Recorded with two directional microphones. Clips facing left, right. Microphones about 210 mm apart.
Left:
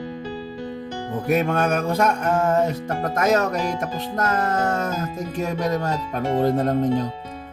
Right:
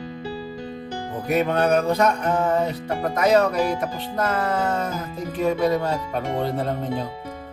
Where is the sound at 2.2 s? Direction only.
45° left (ahead or behind).